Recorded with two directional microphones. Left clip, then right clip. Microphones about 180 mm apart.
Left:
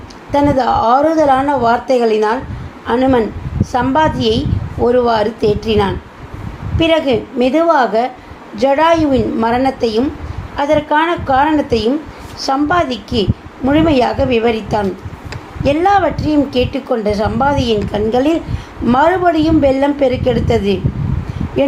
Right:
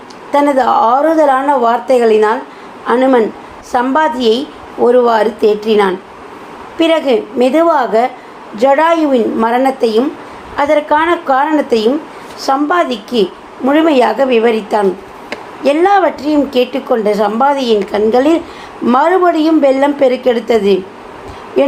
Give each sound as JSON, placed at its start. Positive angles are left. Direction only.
{"t": 0.3, "sound": "a woman's voice", "side_deg": -10}